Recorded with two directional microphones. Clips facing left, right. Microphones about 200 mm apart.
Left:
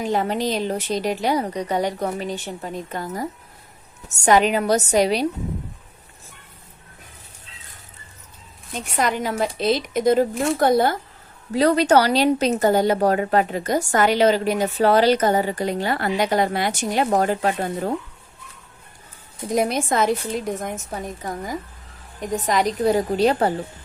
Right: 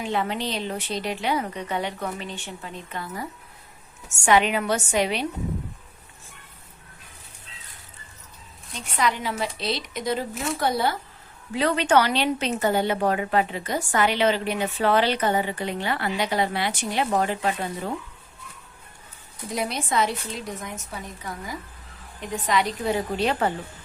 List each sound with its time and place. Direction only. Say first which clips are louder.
0.0 s speech: left 5 dB; 40° left (ahead or behind)
8.7 s a woman's voice: left 3 dB; 45° left (ahead or behind)
19.5 s a woman's voice: left 7 dB; 45° left (ahead or behind)